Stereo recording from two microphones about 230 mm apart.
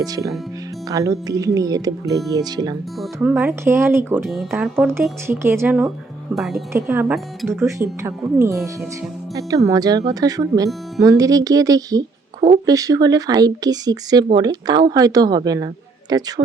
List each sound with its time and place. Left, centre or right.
0.0 s speech: centre
3.0 s speech: centre
7.6 s speech: centre